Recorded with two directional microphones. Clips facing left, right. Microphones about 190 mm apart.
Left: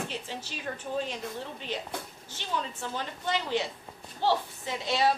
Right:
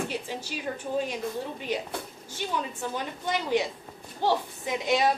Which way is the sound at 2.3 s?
10° right (ahead or behind).